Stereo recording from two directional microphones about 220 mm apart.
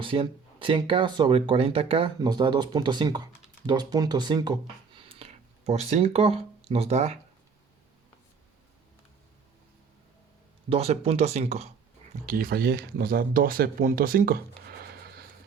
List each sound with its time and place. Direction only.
0.0 s speech: 25° right (ahead or behind)
4.6 s a sound: 25° right (ahead or behind)
10.7 s speech: 25° right (ahead or behind)
12.2 s speech: 40° right (ahead or behind)